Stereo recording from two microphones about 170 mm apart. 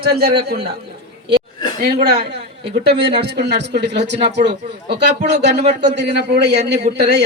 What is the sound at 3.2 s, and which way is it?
Speech, 80° right.